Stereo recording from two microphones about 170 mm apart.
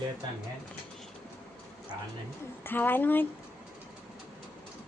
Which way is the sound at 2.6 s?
10° left (ahead or behind).